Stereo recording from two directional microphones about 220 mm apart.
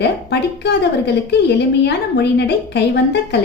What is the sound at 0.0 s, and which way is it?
A woman's voice, 50° left (ahead or behind).